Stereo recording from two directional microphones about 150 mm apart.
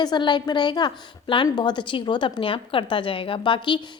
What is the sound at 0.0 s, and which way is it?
A woman's voice, 30° left (ahead or behind).